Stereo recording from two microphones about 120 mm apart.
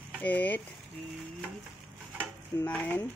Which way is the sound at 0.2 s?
15° left (ahead or behind).